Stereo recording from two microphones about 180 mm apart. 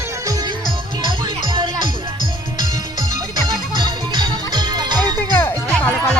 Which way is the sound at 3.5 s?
25° right (ahead or behind).